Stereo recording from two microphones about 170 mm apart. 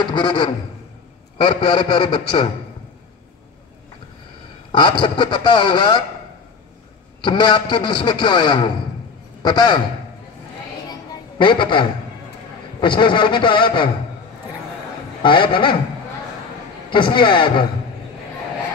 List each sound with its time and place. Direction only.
0.0 s a man's voice: 30° left (ahead or behind)
5.0 s a man's voice: 25° left (ahead or behind)
7.2 s a man's voice: 25° left (ahead or behind)
11.3 s a man's voice: 30° left (ahead or behind)
15.2 s a man's voice: 30° left (ahead or behind)
16.9 s a man's voice: 30° left (ahead or behind)